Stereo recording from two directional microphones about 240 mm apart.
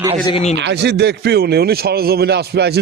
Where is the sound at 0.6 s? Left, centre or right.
Right.